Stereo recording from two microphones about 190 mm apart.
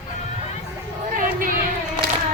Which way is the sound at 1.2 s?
45° right (ahead or behind).